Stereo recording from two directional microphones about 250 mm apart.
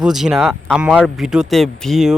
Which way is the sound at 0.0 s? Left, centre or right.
Centre.